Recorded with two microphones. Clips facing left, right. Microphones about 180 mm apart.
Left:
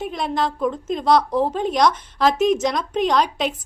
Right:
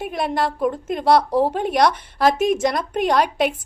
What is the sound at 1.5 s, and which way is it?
A woman's voice, 60° right (ahead or behind).